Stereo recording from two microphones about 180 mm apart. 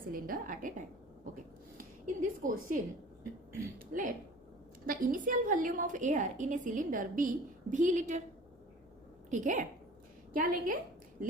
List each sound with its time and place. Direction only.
0.0 s a woman's voice: 50° right (ahead or behind)
1.8 s a woman's voice: 50° right (ahead or behind)
9.3 s a woman's voice: 45° right (ahead or behind)